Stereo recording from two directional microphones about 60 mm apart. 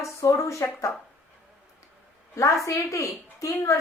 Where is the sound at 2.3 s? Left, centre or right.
Left.